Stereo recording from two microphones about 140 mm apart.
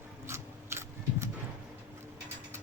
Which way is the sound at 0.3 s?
20° right (ahead or behind).